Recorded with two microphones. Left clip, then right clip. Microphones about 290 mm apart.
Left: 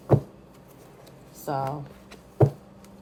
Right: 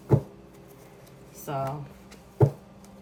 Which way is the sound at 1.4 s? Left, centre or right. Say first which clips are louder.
Left 3 dB; centre.